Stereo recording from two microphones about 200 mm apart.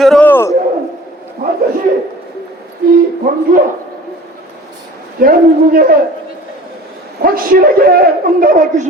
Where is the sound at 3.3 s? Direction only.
45° right (ahead or behind).